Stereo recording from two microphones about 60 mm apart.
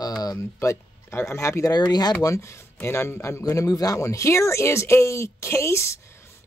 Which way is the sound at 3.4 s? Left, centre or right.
Left.